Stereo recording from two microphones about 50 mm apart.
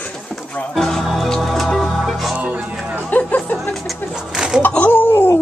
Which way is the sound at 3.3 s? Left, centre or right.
Left.